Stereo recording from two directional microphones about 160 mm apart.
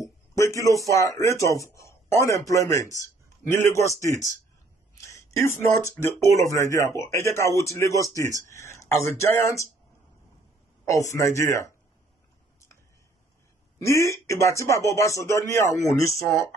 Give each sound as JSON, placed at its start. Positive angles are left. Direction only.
{"t": 0.0, "sound": "a man's voice", "side_deg": 20}
{"t": 10.9, "sound": "speech", "side_deg": 20}
{"t": 13.7, "sound": "speech", "side_deg": 20}